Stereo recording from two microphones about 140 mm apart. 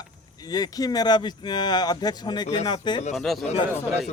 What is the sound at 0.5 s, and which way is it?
Speech, 30° left (ahead or behind).